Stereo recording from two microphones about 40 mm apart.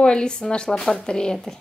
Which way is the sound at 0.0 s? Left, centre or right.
Left.